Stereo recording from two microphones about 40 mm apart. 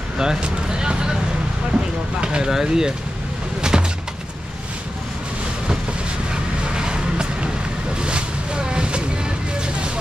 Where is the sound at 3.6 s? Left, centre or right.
Centre.